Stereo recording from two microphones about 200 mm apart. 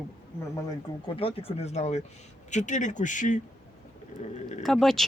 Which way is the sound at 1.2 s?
30° left (ahead or behind).